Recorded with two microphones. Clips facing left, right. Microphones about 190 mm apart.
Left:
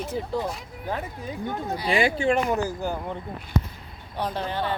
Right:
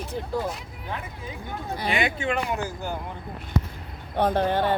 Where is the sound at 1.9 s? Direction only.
30° left (ahead or behind).